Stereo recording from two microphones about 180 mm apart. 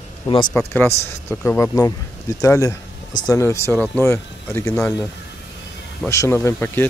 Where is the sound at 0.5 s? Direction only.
15° left (ahead or behind).